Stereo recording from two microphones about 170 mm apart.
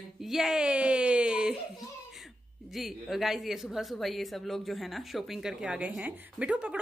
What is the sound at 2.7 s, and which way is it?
Speech, centre (ahead or behind).